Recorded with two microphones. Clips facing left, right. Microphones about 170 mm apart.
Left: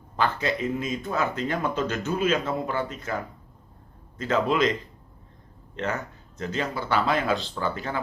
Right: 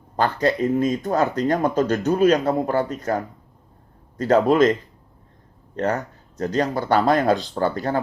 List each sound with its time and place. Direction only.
0.2 s speech: 40° right (ahead or behind)